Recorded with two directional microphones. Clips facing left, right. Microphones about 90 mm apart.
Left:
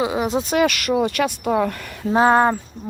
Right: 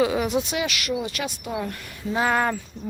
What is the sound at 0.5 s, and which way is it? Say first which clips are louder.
Speech: left 8 dB; 50° left (ahead or behind).